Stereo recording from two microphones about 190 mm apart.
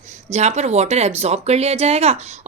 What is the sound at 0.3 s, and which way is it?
Speech, 35° right (ahead or behind).